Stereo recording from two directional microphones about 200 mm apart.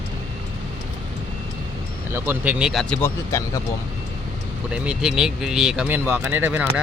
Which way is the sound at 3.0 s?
15° left (ahead or behind).